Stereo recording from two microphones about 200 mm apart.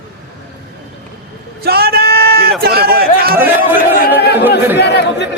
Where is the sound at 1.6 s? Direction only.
50° right (ahead or behind).